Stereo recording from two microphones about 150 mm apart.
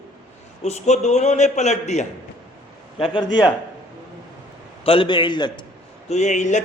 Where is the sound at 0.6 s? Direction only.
50° left (ahead or behind).